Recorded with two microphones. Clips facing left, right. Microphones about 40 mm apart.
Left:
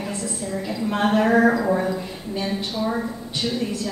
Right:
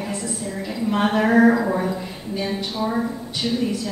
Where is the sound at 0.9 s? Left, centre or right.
Centre.